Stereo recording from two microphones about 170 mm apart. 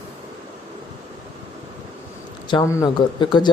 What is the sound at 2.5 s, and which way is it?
Speech, 20° left (ahead or behind).